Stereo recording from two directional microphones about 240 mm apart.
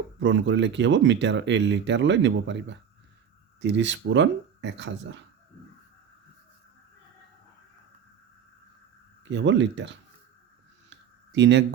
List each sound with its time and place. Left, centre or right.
0.2 s speech: right
9.3 s speech: right
10.8 s a sound: right